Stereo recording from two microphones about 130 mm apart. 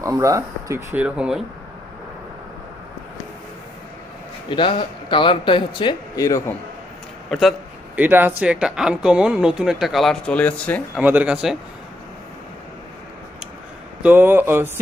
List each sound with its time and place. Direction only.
0.0 s speech: 25° right (ahead or behind)
1.0 s speech: 5° right (ahead or behind)
4.4 s a man's voice: 40° left (ahead or behind)
7.3 s a man's voice: centre (ahead or behind)
7.9 s speech: 15° right (ahead or behind); by 10.8 s 10° left (ahead or behind)
11.0 s speech: 10° right (ahead or behind)
14.0 s speech: 15° right (ahead or behind)